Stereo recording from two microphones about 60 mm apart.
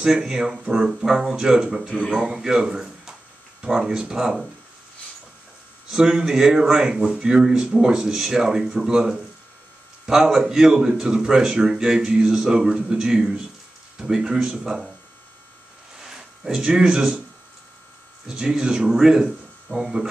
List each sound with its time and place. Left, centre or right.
0.0 s speech: centre
5.9 s speech: centre
16.0 s speech: centre
18.2 s speech: centre